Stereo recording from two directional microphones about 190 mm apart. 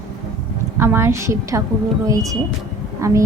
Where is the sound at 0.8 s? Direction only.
15° right (ahead or behind).